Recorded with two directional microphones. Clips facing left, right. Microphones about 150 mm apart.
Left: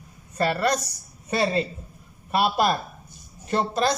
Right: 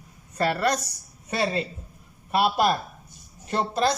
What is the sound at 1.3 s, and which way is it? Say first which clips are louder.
Speech: left 3 dB; 10° right (ahead or behind).